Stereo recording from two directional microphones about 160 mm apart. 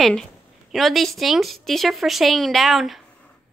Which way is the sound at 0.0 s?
Centre (ahead or behind).